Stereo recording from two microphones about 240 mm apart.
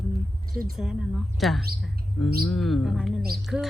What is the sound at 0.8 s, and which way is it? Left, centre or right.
A woman's voice, centre.